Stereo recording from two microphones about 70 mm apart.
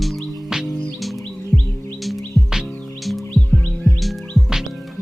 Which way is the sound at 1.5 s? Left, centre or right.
Left.